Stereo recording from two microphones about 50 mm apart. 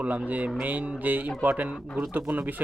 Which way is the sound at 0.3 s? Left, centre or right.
Right.